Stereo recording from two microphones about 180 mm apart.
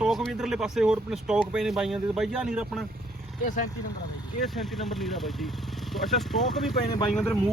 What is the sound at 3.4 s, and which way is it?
Speech, 45° left (ahead or behind).